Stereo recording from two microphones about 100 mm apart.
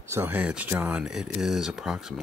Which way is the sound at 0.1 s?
25° right (ahead or behind).